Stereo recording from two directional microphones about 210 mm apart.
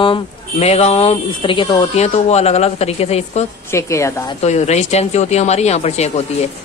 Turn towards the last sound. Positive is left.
turn(degrees=30)  # may be behind; listen again after turning